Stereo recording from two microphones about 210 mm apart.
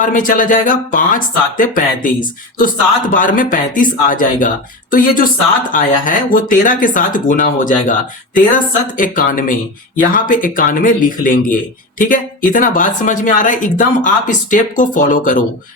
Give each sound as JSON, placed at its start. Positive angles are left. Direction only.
{"t": 0.0, "sound": "speech", "side_deg": 40}